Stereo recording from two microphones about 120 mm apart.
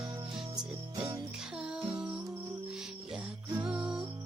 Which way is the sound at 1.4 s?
5° right (ahead or behind).